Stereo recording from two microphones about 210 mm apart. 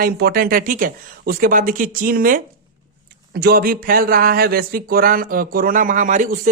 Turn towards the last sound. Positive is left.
turn(degrees=-35)  # may be behind; listen again after turning